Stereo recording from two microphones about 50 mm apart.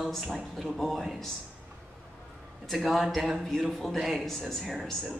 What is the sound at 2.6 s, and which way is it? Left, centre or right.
A man's voice, centre.